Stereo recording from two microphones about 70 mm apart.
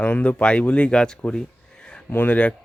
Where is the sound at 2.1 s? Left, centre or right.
Left.